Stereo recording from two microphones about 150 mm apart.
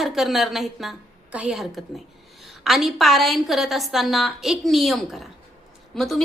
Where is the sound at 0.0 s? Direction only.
Centre (ahead or behind).